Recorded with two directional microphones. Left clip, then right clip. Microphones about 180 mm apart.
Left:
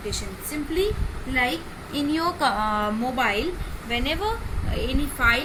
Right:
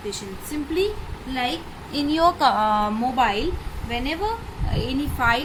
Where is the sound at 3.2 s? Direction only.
50° right (ahead or behind).